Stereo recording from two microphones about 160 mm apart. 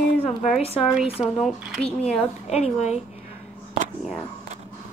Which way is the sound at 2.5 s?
40° left (ahead or behind).